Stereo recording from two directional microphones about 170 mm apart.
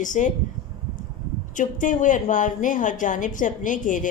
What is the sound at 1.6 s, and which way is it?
A woman's voice, 50° left (ahead or behind).